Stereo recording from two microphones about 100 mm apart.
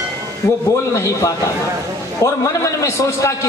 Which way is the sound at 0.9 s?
30° left (ahead or behind).